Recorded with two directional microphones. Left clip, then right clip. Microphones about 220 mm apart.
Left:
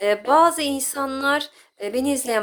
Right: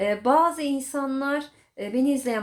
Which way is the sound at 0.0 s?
30° left (ahead or behind).